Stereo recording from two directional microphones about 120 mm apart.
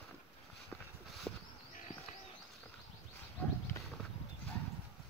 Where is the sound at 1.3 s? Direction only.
Centre (ahead or behind).